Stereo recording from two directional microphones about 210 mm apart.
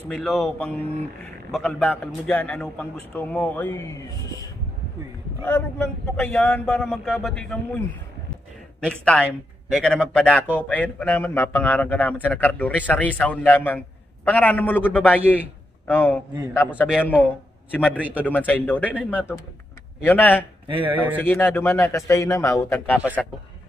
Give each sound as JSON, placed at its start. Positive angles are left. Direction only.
{"t": 0.1, "sound": "a man's voice", "side_deg": 0}
{"t": 5.4, "sound": "speech", "side_deg": 5}
{"t": 8.8, "sound": "a man's voice", "side_deg": 5}
{"t": 20.6, "sound": "speech", "side_deg": -25}
{"t": 20.9, "sound": "a man's voice", "side_deg": -10}
{"t": 21.2, "sound": "a man's voice", "side_deg": 10}